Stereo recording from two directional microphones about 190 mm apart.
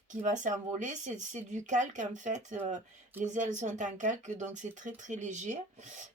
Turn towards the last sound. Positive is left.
turn(degrees=-40)  # may be behind; listen again after turning